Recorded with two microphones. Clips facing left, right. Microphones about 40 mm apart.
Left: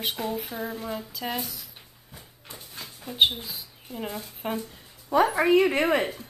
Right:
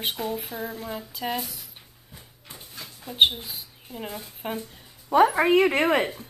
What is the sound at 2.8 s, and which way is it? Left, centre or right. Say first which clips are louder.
Dog: even; centre.